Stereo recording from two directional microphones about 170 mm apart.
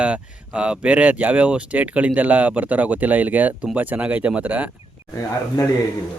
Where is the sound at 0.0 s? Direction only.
5° right (ahead or behind).